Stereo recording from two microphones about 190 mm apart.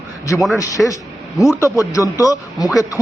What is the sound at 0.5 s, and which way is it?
A man's voice, 15° left (ahead or behind).